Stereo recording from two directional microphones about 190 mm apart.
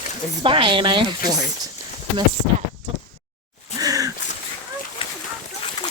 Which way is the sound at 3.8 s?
20° right (ahead or behind).